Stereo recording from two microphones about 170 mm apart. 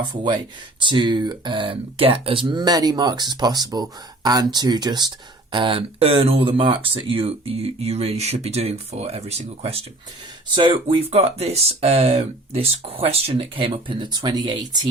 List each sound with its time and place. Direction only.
0.8 s speech: 25° right (ahead or behind)